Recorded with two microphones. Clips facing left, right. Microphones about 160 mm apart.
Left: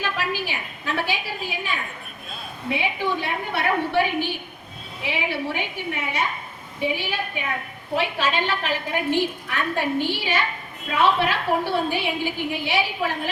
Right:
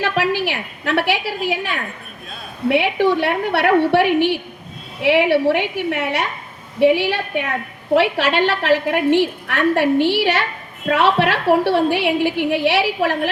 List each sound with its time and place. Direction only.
0.0 s a woman's voice: 75° right (ahead or behind)